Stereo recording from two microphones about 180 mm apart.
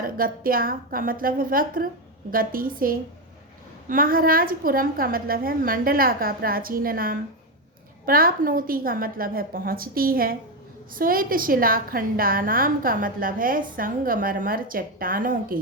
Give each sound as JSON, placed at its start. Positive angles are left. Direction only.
{"t": 0.0, "sound": "a woman's voice", "side_deg": -55}